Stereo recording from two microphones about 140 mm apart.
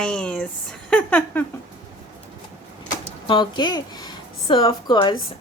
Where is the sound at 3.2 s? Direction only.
35° left (ahead or behind).